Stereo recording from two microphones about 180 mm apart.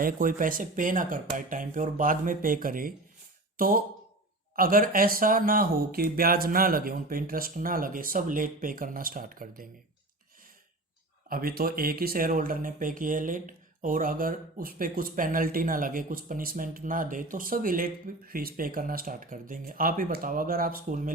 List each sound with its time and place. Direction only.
0.0 s speech: 50° right (ahead or behind)
11.3 s speech: 55° right (ahead or behind)